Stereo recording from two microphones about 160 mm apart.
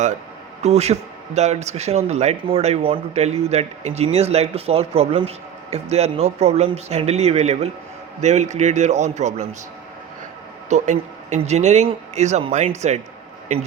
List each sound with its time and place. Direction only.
0.6 s speech: 40° right (ahead or behind)
10.7 s speech: 45° right (ahead or behind)